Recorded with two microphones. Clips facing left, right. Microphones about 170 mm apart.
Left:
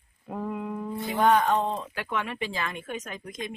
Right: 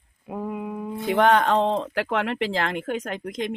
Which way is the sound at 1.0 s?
75° right (ahead or behind).